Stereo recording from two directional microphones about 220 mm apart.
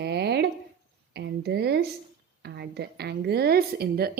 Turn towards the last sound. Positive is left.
turn(degrees=-45)  # may be behind; listen again after turning